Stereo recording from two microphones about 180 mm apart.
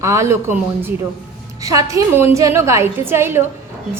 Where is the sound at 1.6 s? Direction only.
20° right (ahead or behind).